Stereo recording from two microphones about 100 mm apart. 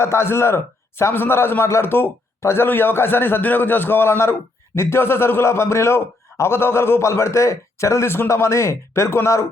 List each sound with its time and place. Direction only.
0.0 s a man's voice: 25° left (ahead or behind)